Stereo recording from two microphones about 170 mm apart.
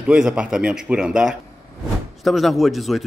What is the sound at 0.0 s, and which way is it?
Speech, 5° right (ahead or behind).